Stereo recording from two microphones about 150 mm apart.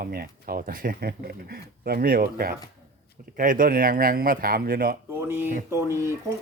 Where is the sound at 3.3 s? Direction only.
65° right (ahead or behind); by 4.9 s 80° right.